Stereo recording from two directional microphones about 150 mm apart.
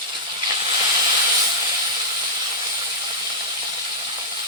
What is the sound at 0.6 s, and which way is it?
Hiss, 25° right (ahead or behind).